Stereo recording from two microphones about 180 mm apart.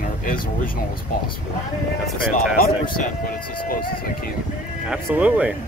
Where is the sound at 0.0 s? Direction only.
50° left (ahead or behind).